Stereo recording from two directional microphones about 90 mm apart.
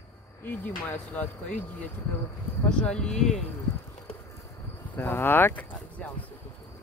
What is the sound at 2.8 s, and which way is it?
Speech, 10° left (ahead or behind).